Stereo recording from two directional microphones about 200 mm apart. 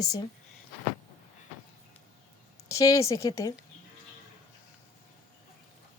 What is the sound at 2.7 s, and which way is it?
Speech, 15° left (ahead or behind).